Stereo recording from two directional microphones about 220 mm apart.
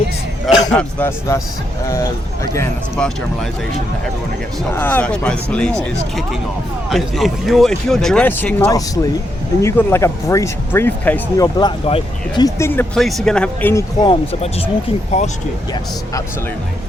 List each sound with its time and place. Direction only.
0.4 s speech: 5° left (ahead or behind)
2.5 s speech: 15° left (ahead or behind)
4.7 s speech: 10° left (ahead or behind)
6.9 s speech: centre (ahead or behind)
11.5 s speech: 20° left (ahead or behind)
14.0 s speech: 25° left (ahead or behind)